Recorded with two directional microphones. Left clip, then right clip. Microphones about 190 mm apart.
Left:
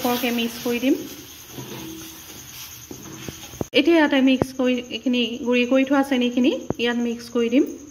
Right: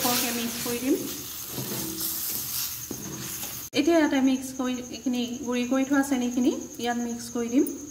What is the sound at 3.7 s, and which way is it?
A woman's voice, 35° left (ahead or behind).